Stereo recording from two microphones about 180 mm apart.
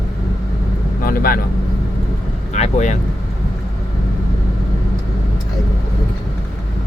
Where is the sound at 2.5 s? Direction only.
40° left (ahead or behind).